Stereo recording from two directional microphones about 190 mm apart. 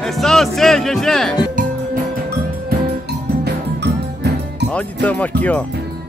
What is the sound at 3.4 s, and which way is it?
Music, 60° right (ahead or behind).